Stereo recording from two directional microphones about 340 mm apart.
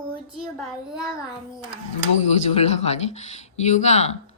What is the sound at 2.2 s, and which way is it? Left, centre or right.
Speech, centre.